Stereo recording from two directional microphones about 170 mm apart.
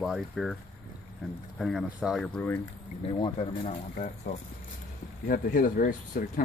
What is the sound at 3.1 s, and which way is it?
Speech, 35° left (ahead or behind).